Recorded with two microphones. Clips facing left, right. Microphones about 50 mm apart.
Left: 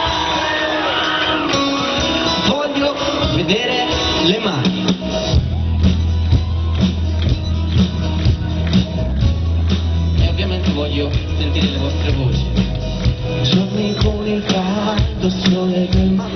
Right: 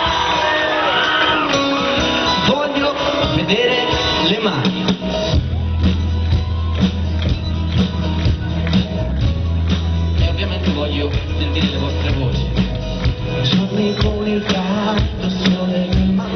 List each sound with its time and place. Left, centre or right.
0.0 s music: right
7.7 s music: centre
10.6 s music: centre